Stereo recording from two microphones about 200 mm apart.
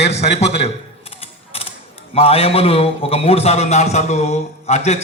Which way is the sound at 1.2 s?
30° left (ahead or behind).